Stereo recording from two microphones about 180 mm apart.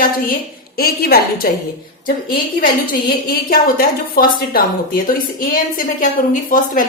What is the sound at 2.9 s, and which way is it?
A woman's voice, 55° left (ahead or behind).